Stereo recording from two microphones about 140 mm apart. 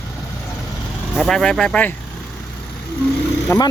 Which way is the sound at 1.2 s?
5° left (ahead or behind).